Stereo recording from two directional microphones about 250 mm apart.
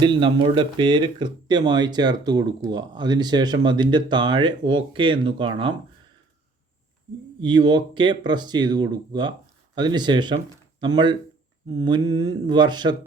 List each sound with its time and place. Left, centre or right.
0.0 s speech: centre
7.4 s speech: centre